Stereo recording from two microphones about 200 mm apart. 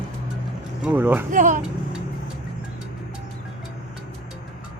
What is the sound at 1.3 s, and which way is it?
Speech, 40° right (ahead or behind).